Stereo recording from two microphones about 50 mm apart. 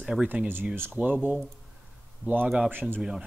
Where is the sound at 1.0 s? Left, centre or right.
Right.